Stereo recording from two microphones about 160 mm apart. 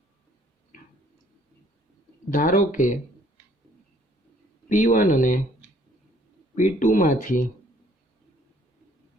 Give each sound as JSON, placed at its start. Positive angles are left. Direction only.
{"t": 2.3, "sound": "speech", "side_deg": 60}
{"t": 4.7, "sound": "speech", "side_deg": 55}
{"t": 6.6, "sound": "speech", "side_deg": 50}